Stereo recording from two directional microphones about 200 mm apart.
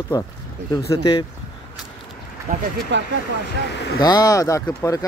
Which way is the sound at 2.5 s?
40° right (ahead or behind).